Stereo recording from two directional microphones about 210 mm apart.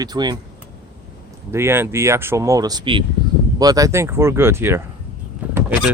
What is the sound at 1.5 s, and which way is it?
Speech, 10° right (ahead or behind).